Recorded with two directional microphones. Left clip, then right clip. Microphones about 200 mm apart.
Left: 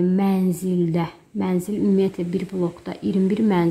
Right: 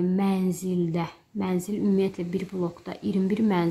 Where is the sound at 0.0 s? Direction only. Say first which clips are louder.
Left 5 dB; 10° left (ahead or behind).